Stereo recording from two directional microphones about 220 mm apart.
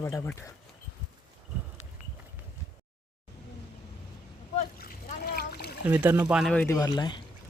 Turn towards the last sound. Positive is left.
turn(degrees=20)  # may be behind; listen again after turning